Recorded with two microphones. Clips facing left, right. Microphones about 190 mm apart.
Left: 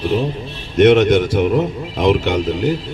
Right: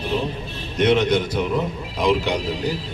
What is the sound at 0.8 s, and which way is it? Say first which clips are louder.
A man's voice: left 7 dB; 55° left (ahead or behind).